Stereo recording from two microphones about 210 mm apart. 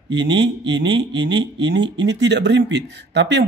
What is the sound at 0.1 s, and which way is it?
Speech, 55° right (ahead or behind).